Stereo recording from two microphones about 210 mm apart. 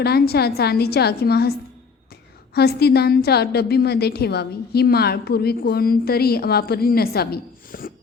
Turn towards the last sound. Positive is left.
turn(degrees=45)  # may be behind; listen again after turning